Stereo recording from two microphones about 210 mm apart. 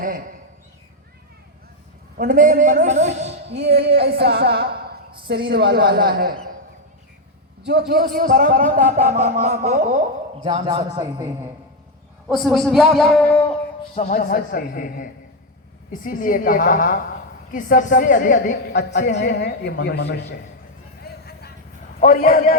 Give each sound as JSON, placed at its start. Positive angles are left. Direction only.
{"t": 0.0, "sound": "a man's voice", "side_deg": -40}
{"t": 2.1, "sound": "a man's voice", "side_deg": -40}
{"t": 3.6, "sound": "a woman's voice", "side_deg": -50}
{"t": 7.7, "sound": "a man's voice", "side_deg": -50}
{"t": 12.3, "sound": "a man's voice", "side_deg": 0}
{"t": 13.9, "sound": "speech", "side_deg": 35}
{"t": 18.7, "sound": "a woman's voice", "side_deg": 55}
{"t": 21.0, "sound": "music", "side_deg": 50}
{"t": 22.0, "sound": "a woman's voice", "side_deg": 40}